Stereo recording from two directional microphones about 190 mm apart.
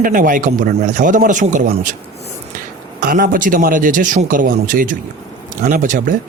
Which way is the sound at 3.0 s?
50° right (ahead or behind).